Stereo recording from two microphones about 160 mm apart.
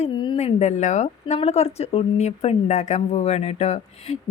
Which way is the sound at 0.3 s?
45° left (ahead or behind).